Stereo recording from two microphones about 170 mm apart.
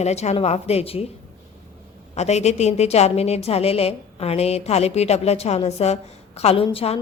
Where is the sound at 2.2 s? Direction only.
40° left (ahead or behind).